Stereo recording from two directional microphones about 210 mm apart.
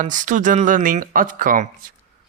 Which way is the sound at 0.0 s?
35° right (ahead or behind).